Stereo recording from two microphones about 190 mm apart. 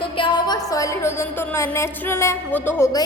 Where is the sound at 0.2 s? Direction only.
25° left (ahead or behind).